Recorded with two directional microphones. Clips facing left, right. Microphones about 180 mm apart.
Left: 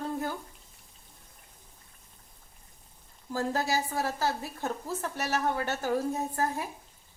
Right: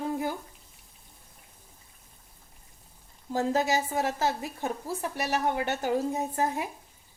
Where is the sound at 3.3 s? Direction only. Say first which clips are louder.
Right 3 dB; 20° right (ahead or behind).